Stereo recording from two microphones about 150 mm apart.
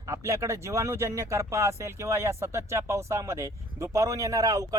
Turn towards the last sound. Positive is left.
turn(degrees=-25)  # may be behind; listen again after turning